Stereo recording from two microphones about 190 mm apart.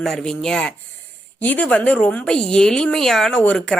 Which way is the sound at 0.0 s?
5° left (ahead or behind).